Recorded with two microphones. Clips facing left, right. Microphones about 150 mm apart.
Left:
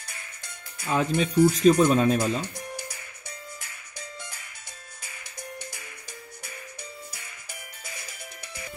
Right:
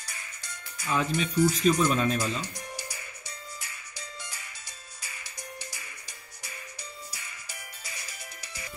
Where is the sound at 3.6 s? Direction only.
55° left (ahead or behind).